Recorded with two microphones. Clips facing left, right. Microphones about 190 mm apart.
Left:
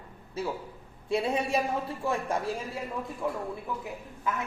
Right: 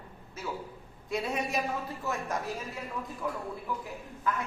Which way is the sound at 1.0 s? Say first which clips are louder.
Left 4 dB; 30° left (ahead or behind).